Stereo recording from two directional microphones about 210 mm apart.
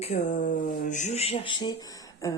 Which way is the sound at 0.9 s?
35° left (ahead or behind).